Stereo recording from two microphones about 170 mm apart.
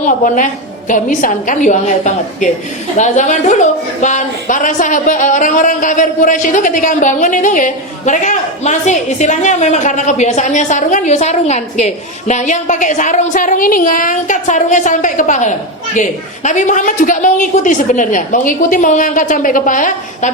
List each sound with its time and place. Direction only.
0.0 s a woman's voice: 50° left (ahead or behind)